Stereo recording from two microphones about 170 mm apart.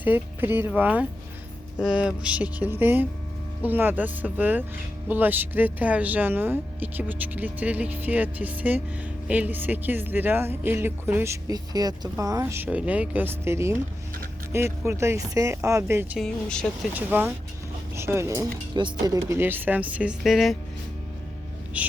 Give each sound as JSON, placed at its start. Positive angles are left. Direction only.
{"t": 0.0, "sound": "speech", "side_deg": -10}
{"t": 16.1, "sound": "speech", "side_deg": 5}
{"t": 16.9, "sound": "speech", "side_deg": -10}
{"t": 21.7, "sound": "speech", "side_deg": -10}